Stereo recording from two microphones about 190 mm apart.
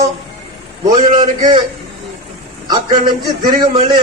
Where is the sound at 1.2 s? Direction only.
20° right (ahead or behind).